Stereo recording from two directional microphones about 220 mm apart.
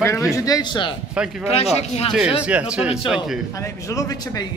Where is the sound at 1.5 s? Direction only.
30° left (ahead or behind).